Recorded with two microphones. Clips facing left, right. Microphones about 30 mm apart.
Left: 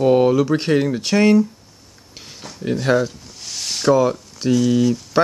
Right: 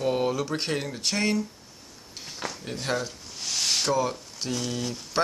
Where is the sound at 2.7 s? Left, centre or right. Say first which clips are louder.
Left 13 dB; centre.